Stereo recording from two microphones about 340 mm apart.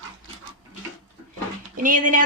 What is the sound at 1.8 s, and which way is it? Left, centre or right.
Speech, right.